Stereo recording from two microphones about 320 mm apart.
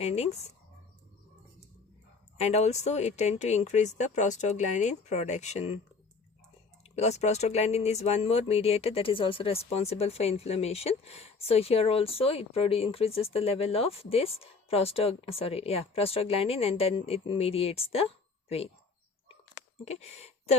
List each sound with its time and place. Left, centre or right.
0.0 s speech: centre
2.4 s speech: centre
6.8 s speech: left
19.8 s speech: centre